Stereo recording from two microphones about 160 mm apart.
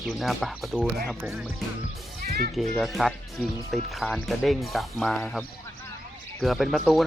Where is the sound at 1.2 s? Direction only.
15° right (ahead or behind).